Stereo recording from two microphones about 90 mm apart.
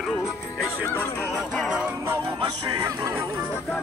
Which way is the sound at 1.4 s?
5° right (ahead or behind).